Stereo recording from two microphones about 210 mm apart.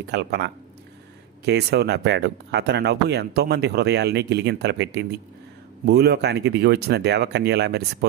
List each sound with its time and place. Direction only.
0.0 s speech: 50° right (ahead or behind)